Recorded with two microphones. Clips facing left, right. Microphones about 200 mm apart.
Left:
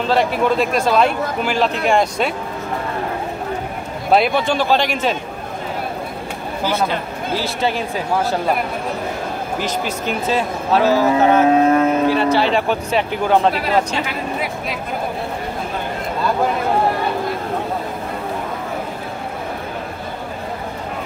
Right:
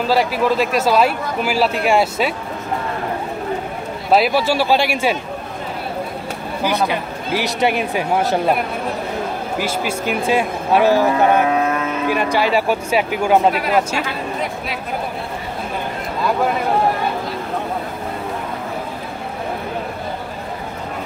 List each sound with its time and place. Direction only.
0.0 s a man's voice: 5° right (ahead or behind)
4.1 s speech: 5° right (ahead or behind)
6.6 s speech: 15° right (ahead or behind)
9.6 s speech: 10° right (ahead or behind)
11.4 s vehicle: 30° left (ahead or behind)
12.1 s speech: 15° right (ahead or behind)